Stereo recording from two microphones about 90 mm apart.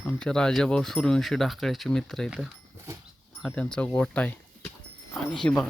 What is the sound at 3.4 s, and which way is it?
Speech, 10° left (ahead or behind).